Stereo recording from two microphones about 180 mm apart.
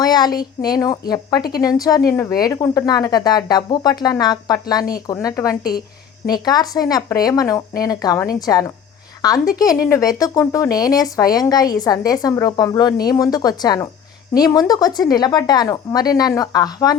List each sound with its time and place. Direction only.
0.0 s speech: 20° left (ahead or behind)